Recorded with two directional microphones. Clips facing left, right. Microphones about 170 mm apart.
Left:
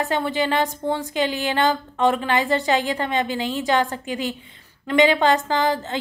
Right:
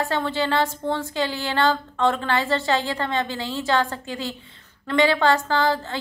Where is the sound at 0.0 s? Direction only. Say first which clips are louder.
Left 2 dB; 15° left (ahead or behind).